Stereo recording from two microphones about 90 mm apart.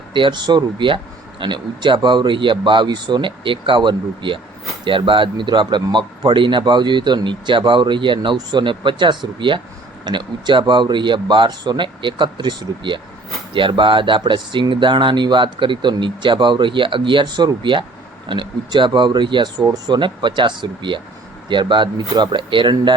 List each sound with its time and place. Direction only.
0.1 s speech: 60° right (ahead or behind)